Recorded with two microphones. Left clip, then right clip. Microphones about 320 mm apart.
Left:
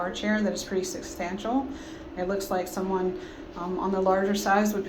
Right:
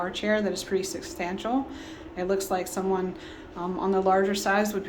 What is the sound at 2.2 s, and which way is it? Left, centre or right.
A woman's voice, right.